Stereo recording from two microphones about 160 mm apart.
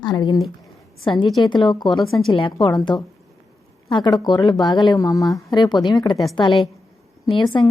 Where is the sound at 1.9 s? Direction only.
Centre (ahead or behind).